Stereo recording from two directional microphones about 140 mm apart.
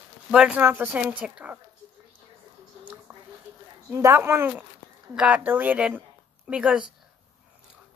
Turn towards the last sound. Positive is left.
turn(degrees=-5)  # may be behind; listen again after turning